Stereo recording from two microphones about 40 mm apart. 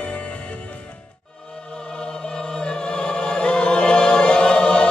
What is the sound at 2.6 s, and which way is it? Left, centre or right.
Choir, left.